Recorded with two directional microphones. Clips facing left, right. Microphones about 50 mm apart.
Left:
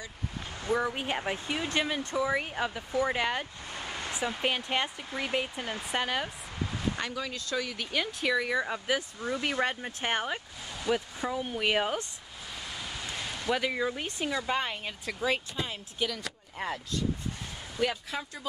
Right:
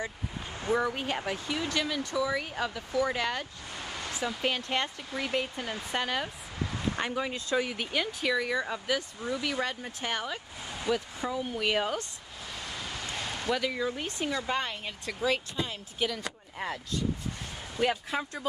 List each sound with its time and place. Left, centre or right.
0.8 s speech: centre
1.2 s speech: left; by 6.3 s centre
7.0 s speech: right
7.9 s speech: centre
9.2 s speech: left
10.9 s speech: centre
13.5 s speech: centre
16.0 s speech: centre
17.7 s speech: centre